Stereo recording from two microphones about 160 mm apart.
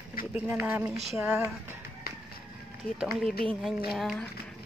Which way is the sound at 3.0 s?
Centre (ahead or behind).